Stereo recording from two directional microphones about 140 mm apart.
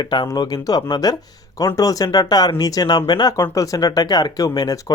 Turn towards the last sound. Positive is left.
turn(degrees=25)  # may be behind; listen again after turning